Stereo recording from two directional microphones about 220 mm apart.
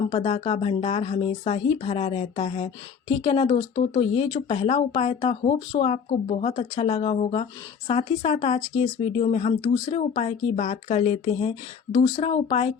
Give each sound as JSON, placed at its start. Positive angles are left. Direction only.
{"t": 0.1, "sound": "speech", "side_deg": 25}